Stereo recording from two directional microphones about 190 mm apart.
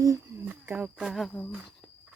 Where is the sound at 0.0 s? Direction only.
15° right (ahead or behind).